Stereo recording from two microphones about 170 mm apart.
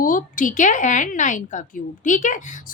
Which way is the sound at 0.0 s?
50° left (ahead or behind).